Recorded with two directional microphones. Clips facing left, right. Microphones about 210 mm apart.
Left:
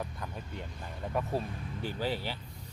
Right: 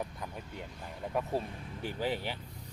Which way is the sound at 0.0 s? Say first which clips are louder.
Even; 15° right (ahead or behind).